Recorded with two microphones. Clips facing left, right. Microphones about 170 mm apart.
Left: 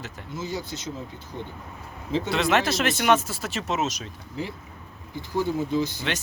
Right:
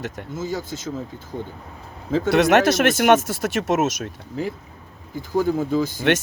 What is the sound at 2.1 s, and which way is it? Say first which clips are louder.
Speech: right 7 dB; 50° right (ahead or behind).